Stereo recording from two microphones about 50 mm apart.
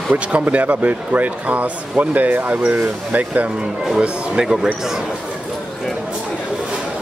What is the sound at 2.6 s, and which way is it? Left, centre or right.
Speech, right.